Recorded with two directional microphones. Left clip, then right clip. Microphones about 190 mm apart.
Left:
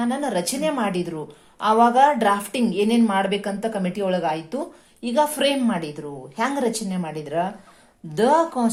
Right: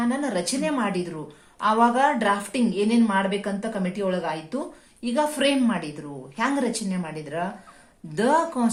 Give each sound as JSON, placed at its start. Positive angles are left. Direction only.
{"t": 0.0, "sound": "a woman's voice", "side_deg": 45}